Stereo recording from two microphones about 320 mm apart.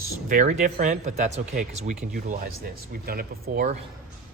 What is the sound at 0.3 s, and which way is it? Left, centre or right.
Speech, right.